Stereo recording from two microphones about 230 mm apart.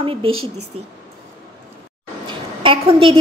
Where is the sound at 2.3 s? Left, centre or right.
Right.